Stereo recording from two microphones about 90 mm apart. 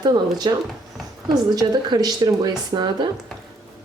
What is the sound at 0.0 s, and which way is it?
Speech, 50° right (ahead or behind).